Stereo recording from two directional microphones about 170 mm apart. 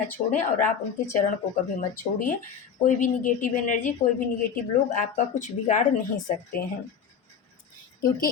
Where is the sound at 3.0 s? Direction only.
50° left (ahead or behind).